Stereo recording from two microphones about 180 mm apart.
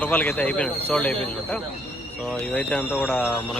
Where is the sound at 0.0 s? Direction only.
10° left (ahead or behind).